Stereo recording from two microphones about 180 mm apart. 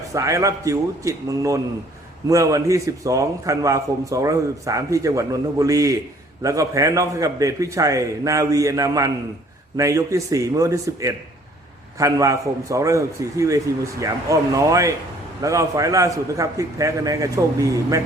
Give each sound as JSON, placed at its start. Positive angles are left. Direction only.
{"t": 0.1, "sound": "a man's voice", "side_deg": -15}